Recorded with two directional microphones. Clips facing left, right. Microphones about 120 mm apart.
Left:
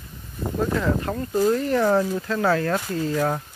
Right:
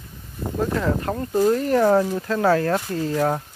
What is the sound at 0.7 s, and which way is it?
Speech, 40° right (ahead or behind).